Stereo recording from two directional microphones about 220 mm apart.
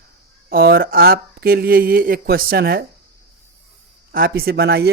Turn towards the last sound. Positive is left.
turn(degrees=-45)  # may be behind; listen again after turning